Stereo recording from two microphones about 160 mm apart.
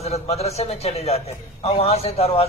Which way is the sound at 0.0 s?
40° left (ahead or behind).